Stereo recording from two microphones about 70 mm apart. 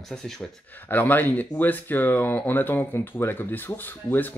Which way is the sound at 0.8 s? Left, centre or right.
Left.